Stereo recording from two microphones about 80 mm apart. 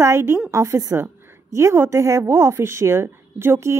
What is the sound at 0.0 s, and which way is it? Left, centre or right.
A woman's voice, right.